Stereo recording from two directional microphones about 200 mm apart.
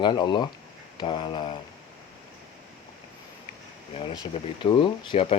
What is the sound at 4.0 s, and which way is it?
Speech, 25° left (ahead or behind).